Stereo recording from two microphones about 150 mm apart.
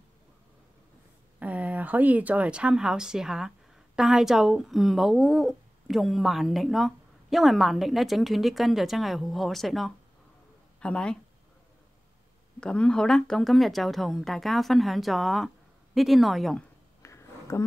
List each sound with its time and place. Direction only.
1.4 s speech: 10° right (ahead or behind); by 11.1 s 5° left (ahead or behind)
12.5 s speech: 5° left (ahead or behind)
17.0 s a sound: 20° left (ahead or behind)